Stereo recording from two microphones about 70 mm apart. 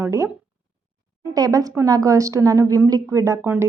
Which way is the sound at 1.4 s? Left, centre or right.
Right.